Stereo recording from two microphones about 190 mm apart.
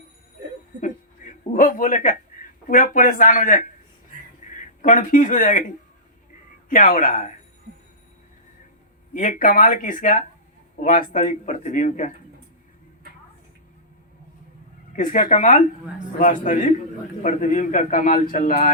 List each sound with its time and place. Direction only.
0.8 s a sound: 45° left (ahead or behind)
2.6 s a man's voice: 45° left (ahead or behind)
9.1 s a man's voice: 45° left (ahead or behind)
14.9 s a man's voice: 45° left (ahead or behind)